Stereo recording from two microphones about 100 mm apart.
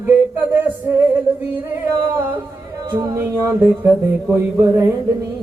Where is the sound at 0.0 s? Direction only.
20° right (ahead or behind).